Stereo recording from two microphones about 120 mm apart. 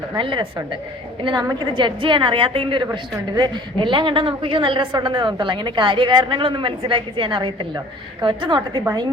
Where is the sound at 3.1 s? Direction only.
35° right (ahead or behind).